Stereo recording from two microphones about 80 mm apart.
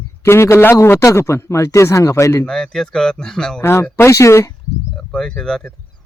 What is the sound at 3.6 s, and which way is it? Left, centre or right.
Speech, left.